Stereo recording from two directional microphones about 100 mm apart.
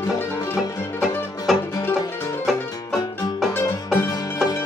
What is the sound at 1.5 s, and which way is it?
Music, centre (ahead or behind).